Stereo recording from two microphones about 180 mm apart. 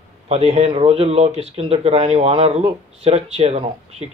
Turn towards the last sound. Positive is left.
turn(degrees=-30)  # may be behind; listen again after turning